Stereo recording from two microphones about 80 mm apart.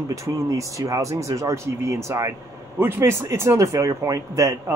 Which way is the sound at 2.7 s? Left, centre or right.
Right.